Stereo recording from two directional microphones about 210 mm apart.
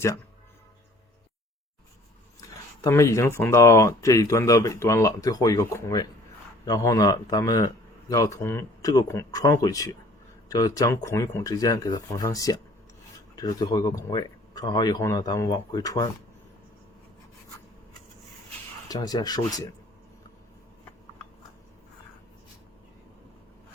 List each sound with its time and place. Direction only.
2.8 s speech: 15° left (ahead or behind)
18.9 s speech: 20° left (ahead or behind)